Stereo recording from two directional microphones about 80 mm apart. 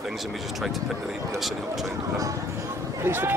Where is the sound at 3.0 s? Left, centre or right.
Right.